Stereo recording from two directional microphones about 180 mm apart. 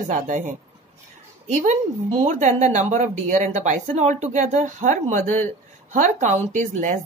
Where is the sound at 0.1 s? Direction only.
45° right (ahead or behind).